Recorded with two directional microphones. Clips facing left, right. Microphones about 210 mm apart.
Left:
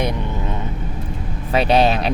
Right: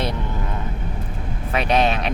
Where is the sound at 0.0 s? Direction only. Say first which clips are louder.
Left 3 dB; 15° left (ahead or behind).